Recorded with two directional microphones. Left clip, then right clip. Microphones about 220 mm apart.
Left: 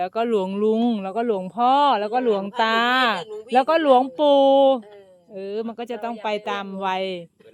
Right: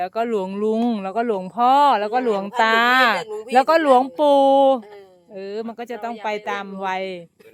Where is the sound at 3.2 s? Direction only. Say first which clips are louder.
Right 4 dB; 30° right (ahead or behind).